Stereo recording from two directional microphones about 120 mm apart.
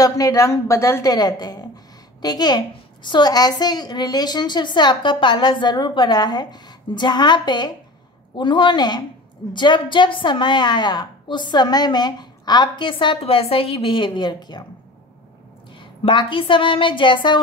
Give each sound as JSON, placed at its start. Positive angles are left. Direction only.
{"t": 0.0, "sound": "a woman's voice", "side_deg": 30}
{"t": 15.8, "sound": "a woman's voice", "side_deg": 45}